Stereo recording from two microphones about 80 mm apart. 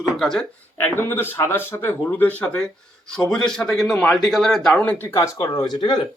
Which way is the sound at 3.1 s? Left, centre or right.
Centre.